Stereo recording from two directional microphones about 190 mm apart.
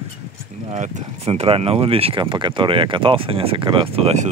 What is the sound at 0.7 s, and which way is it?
Speech, 40° right (ahead or behind).